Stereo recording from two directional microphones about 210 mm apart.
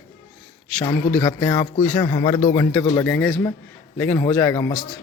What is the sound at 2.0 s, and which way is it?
A man's voice, 15° left (ahead or behind).